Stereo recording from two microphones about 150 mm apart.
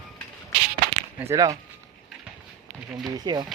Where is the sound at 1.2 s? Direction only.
20° right (ahead or behind).